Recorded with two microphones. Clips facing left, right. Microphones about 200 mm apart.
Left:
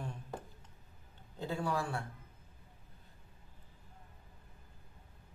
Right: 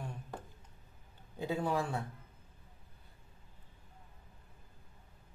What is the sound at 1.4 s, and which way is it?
Speech, 15° right (ahead or behind).